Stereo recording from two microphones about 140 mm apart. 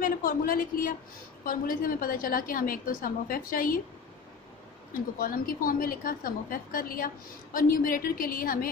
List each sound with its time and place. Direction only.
0.0 s a woman's voice: 80° left
5.2 s a woman's voice: 90° left